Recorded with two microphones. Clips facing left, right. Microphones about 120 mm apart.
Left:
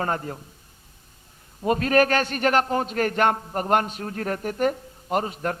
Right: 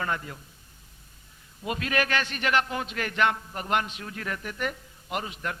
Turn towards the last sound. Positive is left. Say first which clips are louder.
# left 7 dB
turn(degrees=40)  # may be behind; listen again after turning